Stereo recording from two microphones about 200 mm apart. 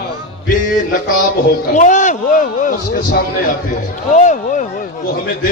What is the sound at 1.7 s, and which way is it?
Speech, 40° left (ahead or behind).